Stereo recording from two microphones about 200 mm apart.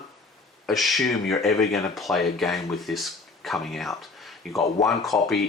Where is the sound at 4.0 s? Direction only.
Centre (ahead or behind).